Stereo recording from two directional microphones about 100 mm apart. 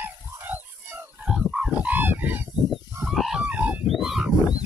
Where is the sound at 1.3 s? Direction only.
5° right (ahead or behind).